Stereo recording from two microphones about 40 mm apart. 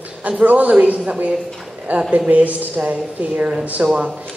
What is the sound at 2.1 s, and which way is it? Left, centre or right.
A man's voice, right.